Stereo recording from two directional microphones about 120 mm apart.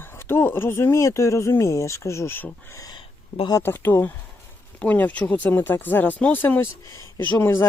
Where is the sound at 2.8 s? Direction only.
40° left (ahead or behind).